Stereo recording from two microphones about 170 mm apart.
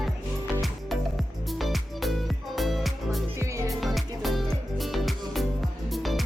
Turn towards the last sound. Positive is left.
turn(degrees=0)  # may be behind; listen again after turning